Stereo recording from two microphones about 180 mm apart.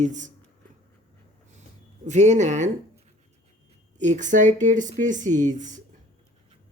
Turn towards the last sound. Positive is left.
turn(degrees=-45)  # may be behind; listen again after turning